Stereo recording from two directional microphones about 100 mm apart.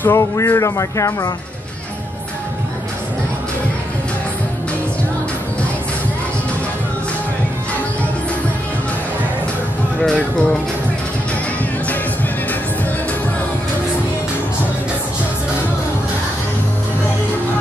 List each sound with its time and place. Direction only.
0.0 s speech: 25° left (ahead or behind)
10.0 s speech: 10° left (ahead or behind)